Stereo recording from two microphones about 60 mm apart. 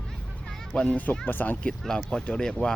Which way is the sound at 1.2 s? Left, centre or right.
Left.